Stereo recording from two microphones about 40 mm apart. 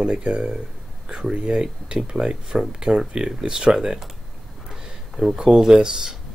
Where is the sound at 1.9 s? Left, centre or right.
Right.